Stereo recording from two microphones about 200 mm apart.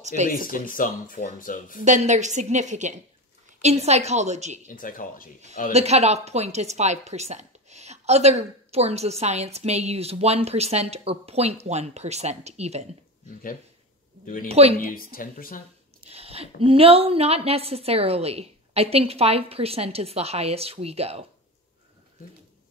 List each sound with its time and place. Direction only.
0.0 s speech: 35° right (ahead or behind)
0.3 s speech: 45° left (ahead or behind)
1.9 s speech: 35° right (ahead or behind)
4.6 s speech: 45° left (ahead or behind)
5.7 s speech: 35° right (ahead or behind)
13.3 s speech: 45° left (ahead or behind)
14.5 s speech: 30° right (ahead or behind)
14.8 s speech: 45° left (ahead or behind)
16.1 s speech: 30° right (ahead or behind)